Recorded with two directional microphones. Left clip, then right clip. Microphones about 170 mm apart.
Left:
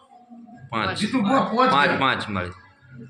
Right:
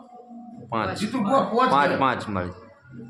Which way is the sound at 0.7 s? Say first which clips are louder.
Left 2 dB; 20° right (ahead or behind).